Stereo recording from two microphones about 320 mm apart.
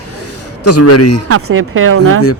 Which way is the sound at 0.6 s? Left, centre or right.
Left.